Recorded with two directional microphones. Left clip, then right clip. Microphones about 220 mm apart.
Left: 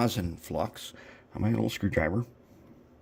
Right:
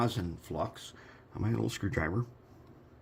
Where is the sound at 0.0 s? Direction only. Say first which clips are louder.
Left 3 dB; 40° left (ahead or behind).